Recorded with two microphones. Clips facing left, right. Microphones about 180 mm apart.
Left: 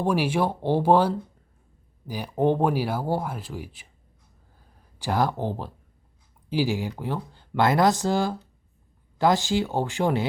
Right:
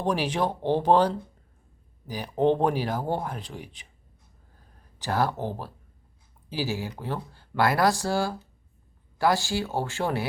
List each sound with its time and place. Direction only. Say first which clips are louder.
0.0 s speech: left 3 dB; 10° left (ahead or behind)
4.9 s speech: left 2 dB; 15° left (ahead or behind)